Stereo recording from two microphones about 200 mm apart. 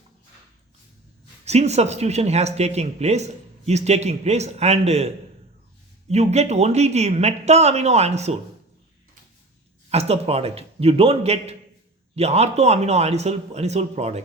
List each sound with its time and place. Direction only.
1.5 s speech: 35° right (ahead or behind)
9.9 s speech: 30° right (ahead or behind)